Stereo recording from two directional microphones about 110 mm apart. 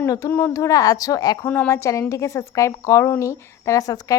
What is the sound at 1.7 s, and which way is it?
A woman's voice, 25° left (ahead or behind).